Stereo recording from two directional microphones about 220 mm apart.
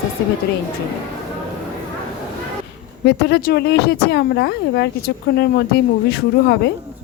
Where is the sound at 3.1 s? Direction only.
45° left (ahead or behind).